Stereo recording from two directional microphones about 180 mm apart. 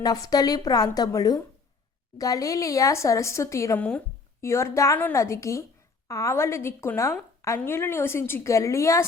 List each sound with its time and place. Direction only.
0.0 s a woman's voice: 20° left (ahead or behind)